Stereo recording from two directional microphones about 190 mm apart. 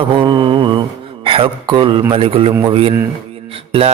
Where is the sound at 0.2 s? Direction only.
25° right (ahead or behind).